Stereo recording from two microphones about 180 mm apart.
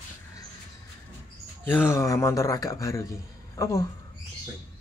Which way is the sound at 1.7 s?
10° left (ahead or behind).